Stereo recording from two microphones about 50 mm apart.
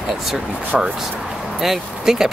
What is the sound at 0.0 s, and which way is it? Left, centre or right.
Speech, centre.